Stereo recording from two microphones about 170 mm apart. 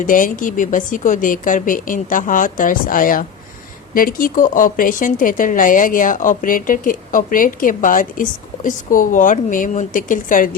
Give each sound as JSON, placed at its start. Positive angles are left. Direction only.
{"t": 0.0, "sound": "speech", "side_deg": 50}